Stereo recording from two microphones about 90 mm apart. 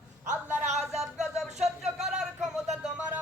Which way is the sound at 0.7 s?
5° right (ahead or behind).